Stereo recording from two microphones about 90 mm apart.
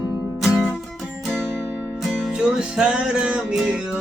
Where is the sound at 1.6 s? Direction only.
20° right (ahead or behind).